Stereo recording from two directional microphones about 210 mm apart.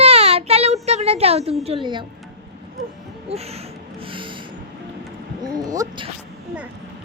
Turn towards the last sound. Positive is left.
turn(degrees=-15)  # may be behind; listen again after turning